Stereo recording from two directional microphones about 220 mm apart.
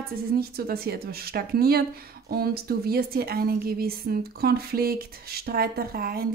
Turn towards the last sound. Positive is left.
turn(degrees=-45)  # may be behind; listen again after turning